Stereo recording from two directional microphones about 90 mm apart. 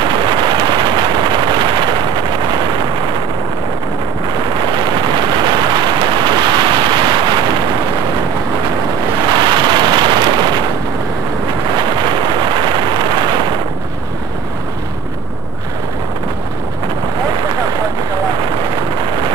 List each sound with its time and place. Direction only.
0.0 s vehicle: 60° right (ahead or behind)
4.9 s a sound: 55° right (ahead or behind)
9.3 s vehicle: 55° right (ahead or behind)
12.0 s vehicle: 55° right (ahead or behind)